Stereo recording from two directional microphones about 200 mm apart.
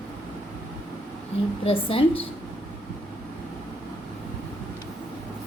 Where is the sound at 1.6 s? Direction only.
30° left (ahead or behind).